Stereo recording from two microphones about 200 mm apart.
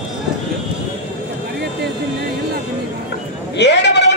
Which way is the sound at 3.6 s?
60° left (ahead or behind).